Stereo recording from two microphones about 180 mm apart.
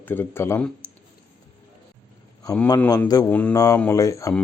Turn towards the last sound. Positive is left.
turn(degrees=15)  # may be behind; listen again after turning